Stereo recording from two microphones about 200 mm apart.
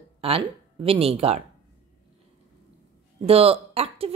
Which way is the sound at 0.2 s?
25° right (ahead or behind).